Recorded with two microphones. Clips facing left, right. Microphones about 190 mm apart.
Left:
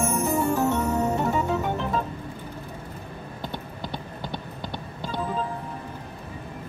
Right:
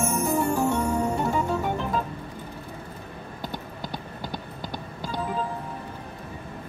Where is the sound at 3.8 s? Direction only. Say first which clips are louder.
Left 1 dB; 40° right (ahead or behind).